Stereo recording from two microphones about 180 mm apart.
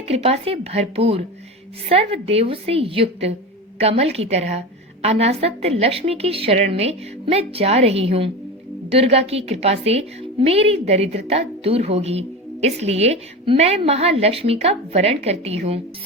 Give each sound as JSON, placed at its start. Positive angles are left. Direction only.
{"t": 0.1, "sound": "a woman's voice", "side_deg": -35}